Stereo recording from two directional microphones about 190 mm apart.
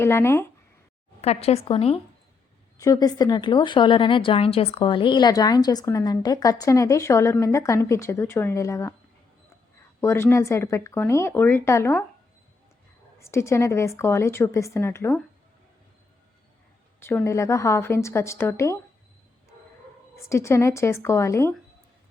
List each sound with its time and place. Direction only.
0.0 s a woman's voice: 15° left (ahead or behind)
1.2 s a woman's voice: 35° left (ahead or behind)
2.7 s speech: 20° left (ahead or behind)
10.0 s a woman's voice: 15° left (ahead or behind)
13.1 s a woman's voice: 15° left (ahead or behind)
17.0 s a woman's voice: 15° left (ahead or behind)
20.3 s a woman's voice: 15° left (ahead or behind)